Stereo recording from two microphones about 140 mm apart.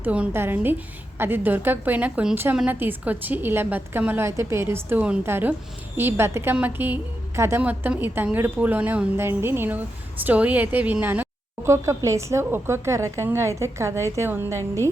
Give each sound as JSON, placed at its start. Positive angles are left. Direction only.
{"t": 0.0, "sound": "a woman's voice", "side_deg": -10}